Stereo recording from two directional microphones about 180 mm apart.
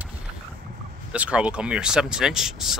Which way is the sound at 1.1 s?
5° right (ahead or behind).